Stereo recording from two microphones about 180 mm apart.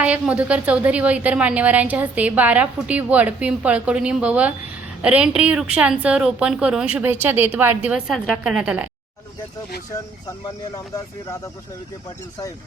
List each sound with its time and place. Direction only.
0.0 s a woman's voice: 5° right (ahead or behind)
9.9 s speech: 20° left (ahead or behind)